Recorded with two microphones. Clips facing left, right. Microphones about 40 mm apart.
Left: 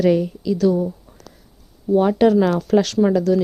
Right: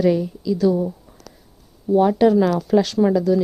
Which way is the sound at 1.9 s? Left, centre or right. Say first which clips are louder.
Even; centre.